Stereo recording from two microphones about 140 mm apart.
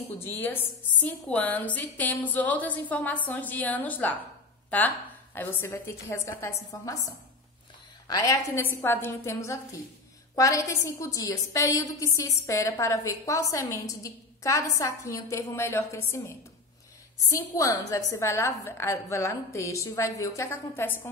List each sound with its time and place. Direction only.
0.4 s a woman's voice: 15° left (ahead or behind)
8.1 s a woman's voice: 25° left (ahead or behind)